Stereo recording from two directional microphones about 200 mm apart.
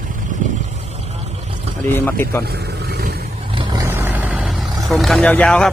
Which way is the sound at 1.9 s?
10° left (ahead or behind).